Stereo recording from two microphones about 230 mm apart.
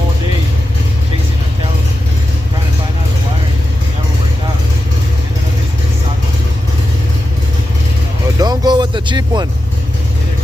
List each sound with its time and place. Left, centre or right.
8.4 s vehicle: centre